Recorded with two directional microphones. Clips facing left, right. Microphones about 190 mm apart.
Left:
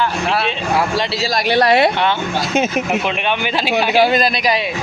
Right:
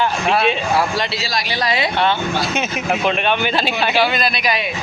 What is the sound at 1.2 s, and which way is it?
Speech, 60° left (ahead or behind).